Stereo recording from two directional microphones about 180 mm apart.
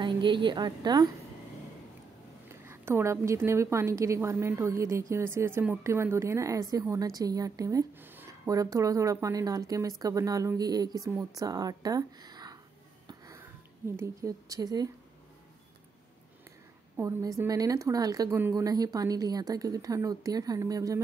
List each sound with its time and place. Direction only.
0.0 s a woman's voice: 25° right (ahead or behind)
2.6 s a woman's voice: 15° right (ahead or behind)
13.9 s a woman's voice: 15° right (ahead or behind)
16.9 s a woman's voice: 20° right (ahead or behind)